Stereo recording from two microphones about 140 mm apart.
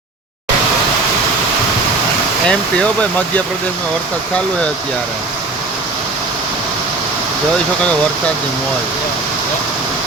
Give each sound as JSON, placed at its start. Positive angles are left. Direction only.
{"t": 2.5, "sound": "speech", "side_deg": 10}